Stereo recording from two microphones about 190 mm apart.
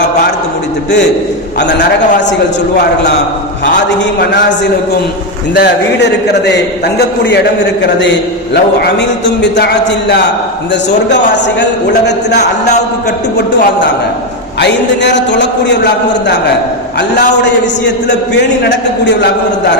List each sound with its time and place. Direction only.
1.5 s a man's voice: 65° left (ahead or behind)
5.5 s a man's voice: 60° left (ahead or behind)
14.6 s a man's voice: 65° left (ahead or behind)
17.8 s a man's voice: 65° left (ahead or behind)